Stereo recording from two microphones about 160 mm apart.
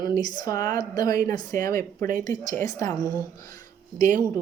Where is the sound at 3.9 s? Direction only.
55° right (ahead or behind).